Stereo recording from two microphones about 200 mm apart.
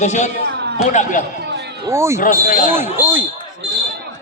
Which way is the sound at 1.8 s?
15° right (ahead or behind).